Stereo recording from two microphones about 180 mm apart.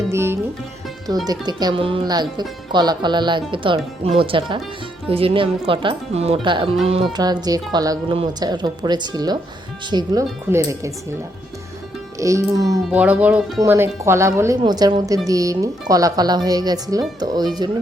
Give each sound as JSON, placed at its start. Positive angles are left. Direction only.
{"t": 0.1, "sound": "music", "side_deg": -15}
{"t": 1.3, "sound": "speech", "side_deg": -20}
{"t": 7.2, "sound": "speech", "side_deg": -20}
{"t": 12.2, "sound": "speech", "side_deg": -15}
{"t": 12.9, "sound": "speech", "side_deg": -5}